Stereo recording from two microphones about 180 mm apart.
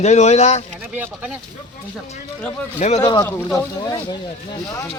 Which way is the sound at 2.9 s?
25° left (ahead or behind).